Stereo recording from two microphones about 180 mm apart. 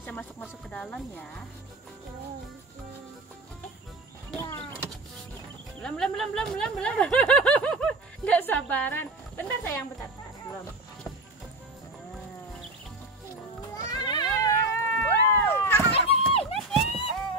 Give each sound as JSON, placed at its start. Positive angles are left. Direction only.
{"t": 0.0, "sound": "speech", "side_deg": 10}
{"t": 4.4, "sound": "vehicle", "side_deg": 15}
{"t": 5.8, "sound": "speech", "side_deg": 5}
{"t": 13.8, "sound": "cat", "side_deg": 20}
{"t": 15.9, "sound": "a sound", "side_deg": 30}
{"t": 16.5, "sound": "a sound", "side_deg": 0}